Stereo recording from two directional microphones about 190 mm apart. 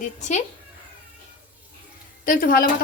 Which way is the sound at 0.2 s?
35° left (ahead or behind).